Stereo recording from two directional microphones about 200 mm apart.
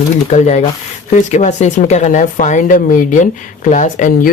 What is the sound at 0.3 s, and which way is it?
Speech, 35° left (ahead or behind).